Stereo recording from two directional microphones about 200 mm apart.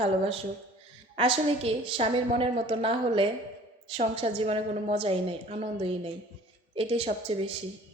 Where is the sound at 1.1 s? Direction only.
30° right (ahead or behind).